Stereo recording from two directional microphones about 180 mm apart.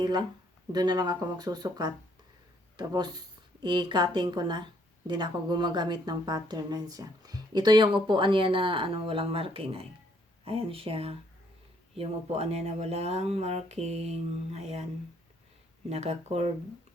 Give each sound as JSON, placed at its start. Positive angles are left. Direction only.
{"t": 0.0, "sound": "a woman's voice", "side_deg": -25}
{"t": 15.9, "sound": "speech", "side_deg": -35}